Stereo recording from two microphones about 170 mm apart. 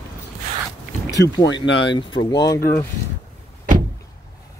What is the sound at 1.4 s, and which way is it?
Speech, 90° left.